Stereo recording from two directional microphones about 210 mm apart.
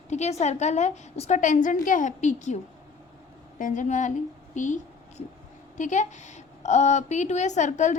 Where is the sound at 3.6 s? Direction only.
40° left (ahead or behind).